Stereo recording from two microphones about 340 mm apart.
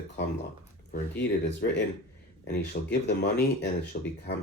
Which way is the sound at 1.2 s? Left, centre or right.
Left.